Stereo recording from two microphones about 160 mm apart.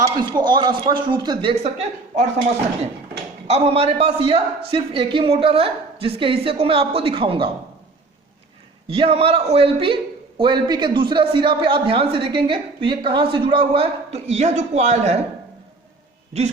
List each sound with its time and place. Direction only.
0.0 s speech: 25° right (ahead or behind)
3.4 s a man's voice: 40° right (ahead or behind)
8.9 s a man's voice: 35° right (ahead or behind)